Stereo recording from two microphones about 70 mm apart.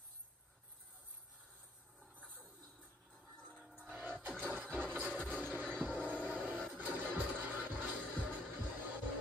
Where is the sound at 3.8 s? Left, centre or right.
Right.